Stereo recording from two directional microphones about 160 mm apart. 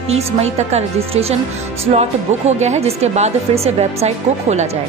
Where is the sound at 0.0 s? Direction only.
40° right (ahead or behind).